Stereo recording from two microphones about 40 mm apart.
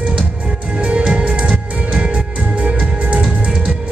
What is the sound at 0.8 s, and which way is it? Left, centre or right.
Music, right.